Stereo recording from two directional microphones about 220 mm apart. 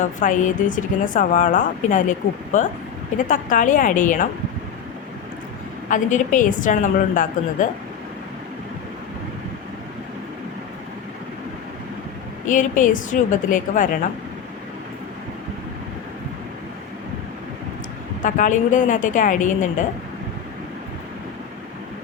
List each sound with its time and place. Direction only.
0.2 s a woman's voice: 35° left (ahead or behind)
5.9 s a woman's voice: 35° left (ahead or behind)
12.5 s a woman's voice: 35° left (ahead or behind)
18.2 s a woman's voice: 35° left (ahead or behind)